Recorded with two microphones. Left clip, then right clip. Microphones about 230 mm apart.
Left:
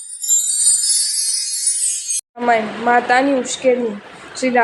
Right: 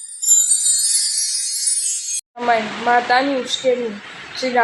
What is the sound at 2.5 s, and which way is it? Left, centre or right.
A woman's voice, left.